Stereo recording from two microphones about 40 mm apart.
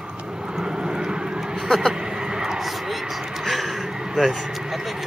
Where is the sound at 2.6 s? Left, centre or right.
Centre.